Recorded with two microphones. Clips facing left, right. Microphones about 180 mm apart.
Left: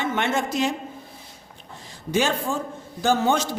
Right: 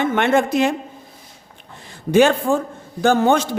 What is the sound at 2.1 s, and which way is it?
A man's voice, 60° right (ahead or behind).